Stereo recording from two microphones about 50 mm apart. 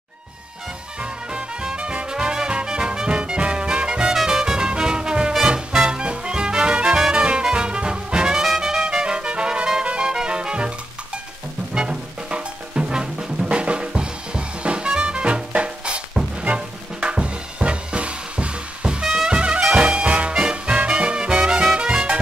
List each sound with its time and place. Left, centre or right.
1.3 s music: centre
8.5 s trumpet: centre
9.8 s music: centre
11.7 s music: centre
19.6 s swing music: centre
21.7 s music: right